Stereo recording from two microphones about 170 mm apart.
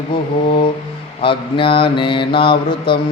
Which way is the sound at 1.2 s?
30° left (ahead or behind).